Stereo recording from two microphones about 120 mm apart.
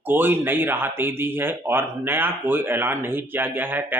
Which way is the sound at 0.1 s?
15° right (ahead or behind).